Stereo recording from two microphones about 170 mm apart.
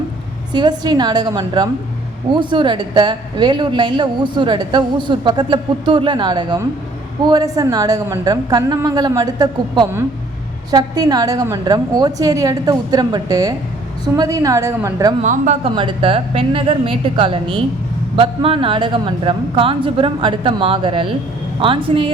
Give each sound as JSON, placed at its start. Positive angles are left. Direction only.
{"t": 0.5, "sound": "speech", "side_deg": -25}
{"t": 15.2, "sound": "speech", "side_deg": -45}
{"t": 15.6, "sound": "speech", "side_deg": -30}